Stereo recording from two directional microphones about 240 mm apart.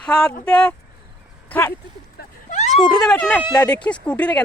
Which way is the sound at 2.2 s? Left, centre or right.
Left.